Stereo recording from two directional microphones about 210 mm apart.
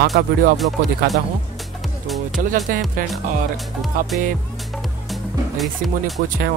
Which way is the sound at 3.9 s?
40° right (ahead or behind).